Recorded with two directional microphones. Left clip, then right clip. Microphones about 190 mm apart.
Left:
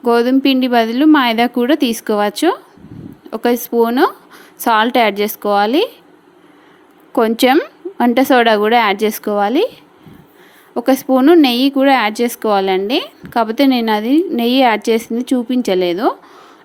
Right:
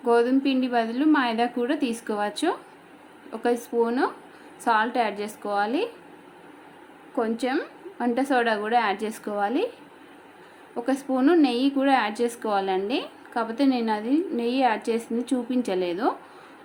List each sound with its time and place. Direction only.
0.0 s speech: 40° left (ahead or behind)
7.2 s speech: 50° left (ahead or behind)
10.8 s a woman's voice: 45° left (ahead or behind)